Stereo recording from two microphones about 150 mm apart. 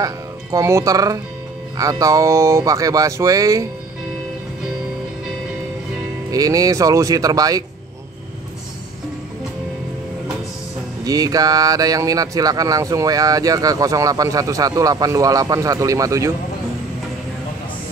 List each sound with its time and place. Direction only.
0.0 s speech: 20° right (ahead or behind)
6.3 s speech: 25° right (ahead or behind)
11.1 s speech: 25° right (ahead or behind)